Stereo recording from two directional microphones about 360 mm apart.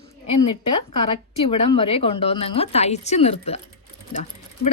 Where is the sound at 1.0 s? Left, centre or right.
Centre.